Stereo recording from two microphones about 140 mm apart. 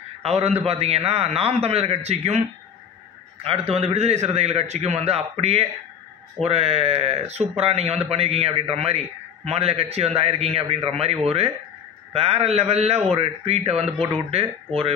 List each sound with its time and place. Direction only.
0.2 s speech: 45° right (ahead or behind)
3.4 s speech: 45° right (ahead or behind)